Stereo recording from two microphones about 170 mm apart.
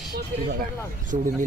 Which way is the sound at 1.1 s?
40° right (ahead or behind).